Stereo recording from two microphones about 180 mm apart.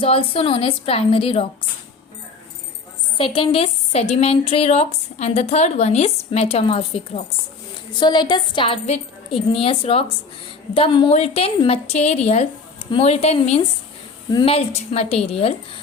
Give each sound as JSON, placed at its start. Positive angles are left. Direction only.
{"t": 0.0, "sound": "a woman's voice", "side_deg": 30}
{"t": 3.2, "sound": "a woman's voice", "side_deg": 30}
{"t": 14.3, "sound": "a woman's voice", "side_deg": 25}
{"t": 14.5, "sound": "a woman's voice", "side_deg": 35}